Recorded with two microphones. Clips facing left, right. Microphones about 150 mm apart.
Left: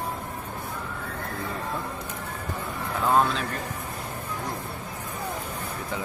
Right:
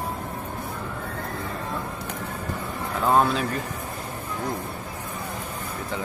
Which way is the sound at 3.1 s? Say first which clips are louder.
Right 2 dB; 10° right (ahead or behind).